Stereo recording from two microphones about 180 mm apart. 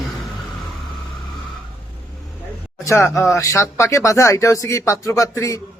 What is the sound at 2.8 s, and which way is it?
Speech, 15° left (ahead or behind).